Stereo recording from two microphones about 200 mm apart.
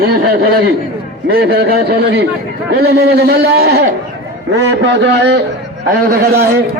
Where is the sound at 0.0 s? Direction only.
50° right (ahead or behind).